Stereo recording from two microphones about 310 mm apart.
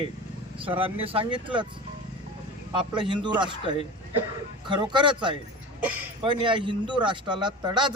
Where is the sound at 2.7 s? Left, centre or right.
Centre.